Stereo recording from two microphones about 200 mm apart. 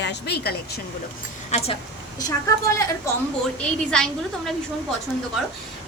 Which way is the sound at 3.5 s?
5° left (ahead or behind).